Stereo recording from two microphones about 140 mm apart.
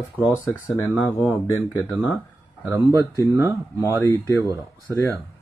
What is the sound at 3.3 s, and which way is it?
Speech, 20° right (ahead or behind).